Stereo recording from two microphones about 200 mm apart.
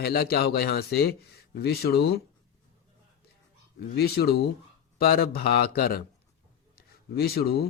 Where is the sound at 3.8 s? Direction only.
50° left (ahead or behind).